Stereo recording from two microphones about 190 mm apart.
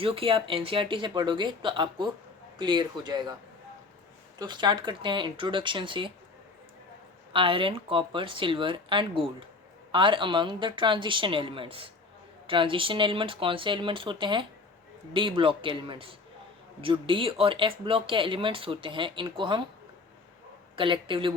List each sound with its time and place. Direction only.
0.0 s speech: 30° right (ahead or behind)
4.4 s speech: 25° right (ahead or behind)
7.3 s speech: 30° right (ahead or behind)
20.7 s speech: 25° right (ahead or behind)